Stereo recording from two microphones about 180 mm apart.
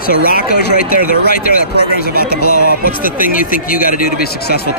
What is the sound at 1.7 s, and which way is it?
A man's voice, 60° left (ahead or behind).